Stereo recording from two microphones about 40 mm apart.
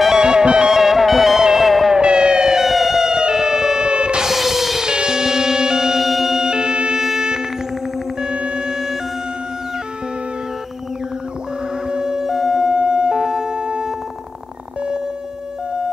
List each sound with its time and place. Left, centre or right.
0.2 s music: centre
0.7 s music: centre
2.0 s music: right
2.6 s music: centre
3.9 s music: right
4.3 s music: centre
4.8 s music: centre
6.5 s music: right
7.0 s music: centre
8.2 s music: right
11.9 s siren: centre
12.7 s siren: right